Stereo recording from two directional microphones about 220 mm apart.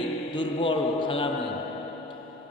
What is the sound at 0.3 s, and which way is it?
Speech, 20° left (ahead or behind).